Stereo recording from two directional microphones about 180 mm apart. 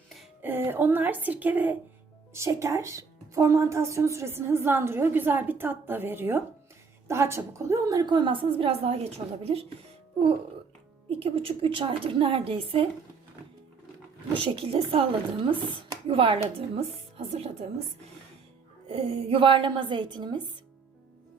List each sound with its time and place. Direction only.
0.4 s a woman's voice: 10° right (ahead or behind); by 9.6 s 35° right (ahead or behind)
11.1 s a woman's voice: 30° right (ahead or behind)
14.4 s a woman's voice: 35° right (ahead or behind)
18.9 s a woman's voice: 30° right (ahead or behind)